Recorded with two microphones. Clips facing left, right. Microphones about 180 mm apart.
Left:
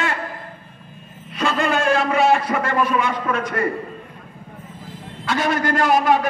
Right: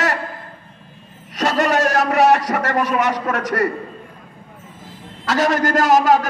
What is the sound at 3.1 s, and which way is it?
Speech, 85° right.